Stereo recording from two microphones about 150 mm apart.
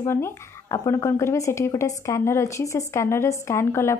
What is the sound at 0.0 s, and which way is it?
A woman's voice, 15° left (ahead or behind).